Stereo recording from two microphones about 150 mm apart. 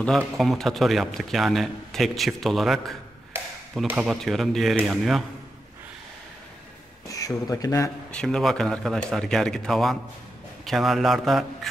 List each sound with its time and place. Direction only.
0.4 s a man's voice: centre (ahead or behind)
3.3 s tap: 15° right (ahead or behind)
3.8 s a man's voice: 10° right (ahead or behind)
7.1 s speech: 25° left (ahead or behind)
8.1 s a man's voice: 5° left (ahead or behind)